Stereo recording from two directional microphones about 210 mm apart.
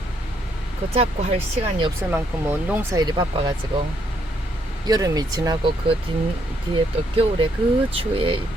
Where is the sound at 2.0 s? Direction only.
10° right (ahead or behind).